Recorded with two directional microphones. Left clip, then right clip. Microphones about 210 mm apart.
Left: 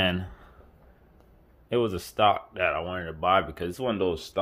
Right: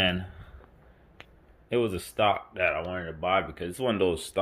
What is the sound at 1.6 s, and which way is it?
Speech, 10° left (ahead or behind).